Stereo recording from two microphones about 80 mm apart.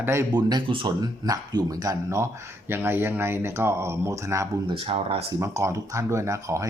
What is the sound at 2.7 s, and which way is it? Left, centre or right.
Speech, right.